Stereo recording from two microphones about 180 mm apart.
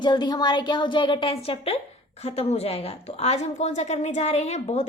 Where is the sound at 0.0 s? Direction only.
25° left (ahead or behind).